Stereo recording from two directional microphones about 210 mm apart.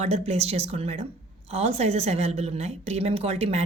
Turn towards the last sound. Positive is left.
turn(degrees=-30)  # may be behind; listen again after turning